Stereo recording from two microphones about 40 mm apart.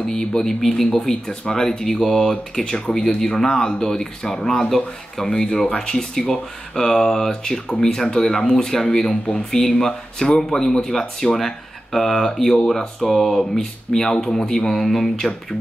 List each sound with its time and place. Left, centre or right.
0.1 s speech: centre